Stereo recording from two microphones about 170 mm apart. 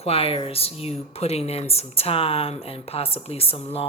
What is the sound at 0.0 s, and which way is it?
Speech, 35° left (ahead or behind).